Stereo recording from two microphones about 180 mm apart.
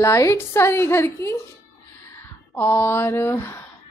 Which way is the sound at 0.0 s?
15° left (ahead or behind).